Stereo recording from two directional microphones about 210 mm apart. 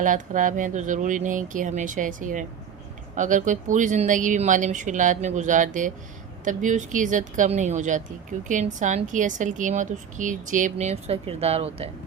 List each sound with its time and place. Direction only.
0.0 s speech: 40° right (ahead or behind)